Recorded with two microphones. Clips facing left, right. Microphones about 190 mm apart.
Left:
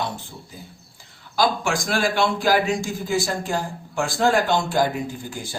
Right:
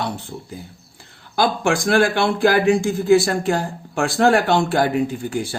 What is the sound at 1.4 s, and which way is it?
A man's voice, 60° right (ahead or behind).